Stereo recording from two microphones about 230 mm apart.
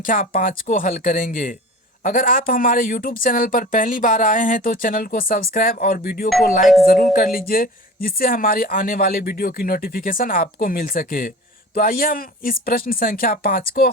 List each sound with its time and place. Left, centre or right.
0.0 s speech: left